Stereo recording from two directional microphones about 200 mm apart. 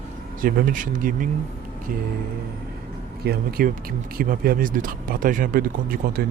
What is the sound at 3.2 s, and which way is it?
Speech, 50° right (ahead or behind).